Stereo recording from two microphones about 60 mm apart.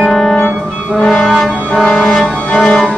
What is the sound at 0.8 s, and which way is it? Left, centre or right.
Brass instrument, left.